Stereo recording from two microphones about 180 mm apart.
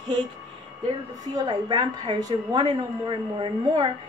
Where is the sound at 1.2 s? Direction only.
20° right (ahead or behind).